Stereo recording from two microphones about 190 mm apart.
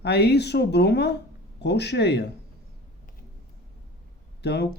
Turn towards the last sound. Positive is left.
turn(degrees=60)  # may be behind; listen again after turning